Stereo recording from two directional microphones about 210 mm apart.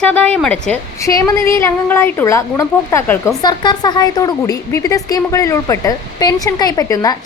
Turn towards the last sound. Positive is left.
turn(degrees=15)  # may be behind; listen again after turning